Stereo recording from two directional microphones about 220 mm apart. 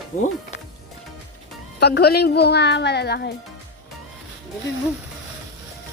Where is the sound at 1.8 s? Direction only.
50° left (ahead or behind).